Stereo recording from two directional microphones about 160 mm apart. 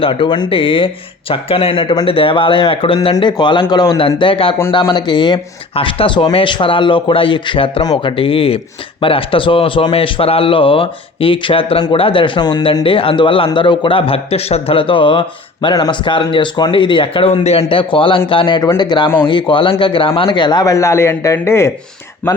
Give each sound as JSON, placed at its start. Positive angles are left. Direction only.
{"t": 0.0, "sound": "a man's voice", "side_deg": 35}